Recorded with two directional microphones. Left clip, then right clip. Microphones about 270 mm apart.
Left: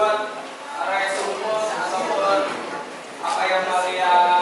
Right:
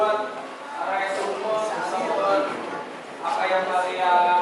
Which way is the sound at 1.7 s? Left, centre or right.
Centre.